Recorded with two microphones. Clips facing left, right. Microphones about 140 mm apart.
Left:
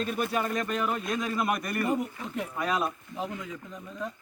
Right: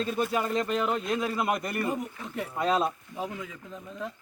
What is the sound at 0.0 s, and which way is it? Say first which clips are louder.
Speech: right 1 dB; 25° right (ahead or behind).